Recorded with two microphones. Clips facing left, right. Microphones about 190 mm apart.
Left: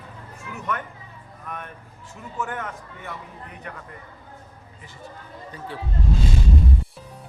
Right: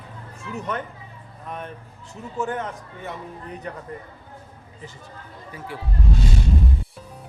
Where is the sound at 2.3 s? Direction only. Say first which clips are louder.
Right 4 dB; 25° right (ahead or behind).